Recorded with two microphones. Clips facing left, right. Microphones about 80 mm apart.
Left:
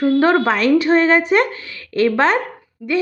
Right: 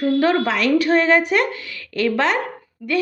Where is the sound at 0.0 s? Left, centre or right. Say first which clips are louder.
Left 3 dB; left.